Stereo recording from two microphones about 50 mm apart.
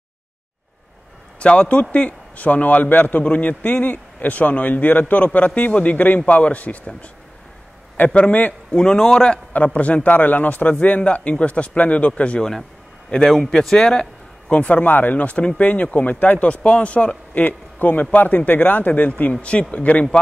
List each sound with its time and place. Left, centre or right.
1.4 s a man's voice: left
8.7 s a man's voice: centre
9.5 s a man's voice: left
14.5 s a man's voice: left